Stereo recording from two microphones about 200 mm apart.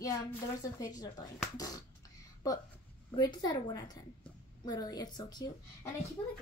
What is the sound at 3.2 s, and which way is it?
A woman's voice, 20° left (ahead or behind).